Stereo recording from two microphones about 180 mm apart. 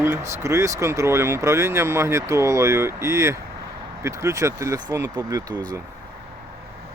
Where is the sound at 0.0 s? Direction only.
15° right (ahead or behind).